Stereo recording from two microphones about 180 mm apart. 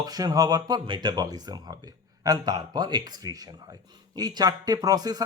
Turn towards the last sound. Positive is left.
turn(degrees=-20)  # may be behind; listen again after turning